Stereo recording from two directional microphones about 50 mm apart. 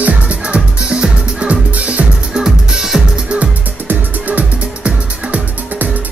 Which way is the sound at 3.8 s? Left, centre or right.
Right.